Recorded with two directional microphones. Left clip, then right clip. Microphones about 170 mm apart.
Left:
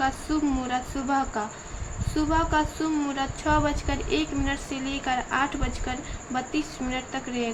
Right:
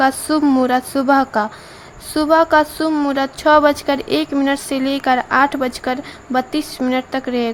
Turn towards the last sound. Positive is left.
turn(degrees=-80)